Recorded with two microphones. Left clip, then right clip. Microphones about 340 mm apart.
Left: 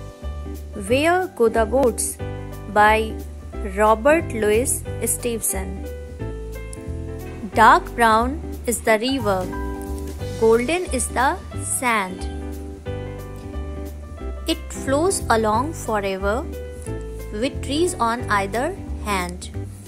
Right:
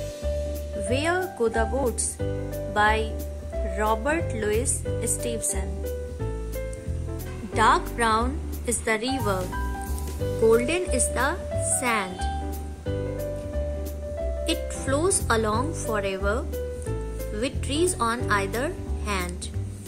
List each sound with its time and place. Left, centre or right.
0.8 s speech: centre
7.5 s speech: centre
10.5 s speech: centre
14.4 s speech: centre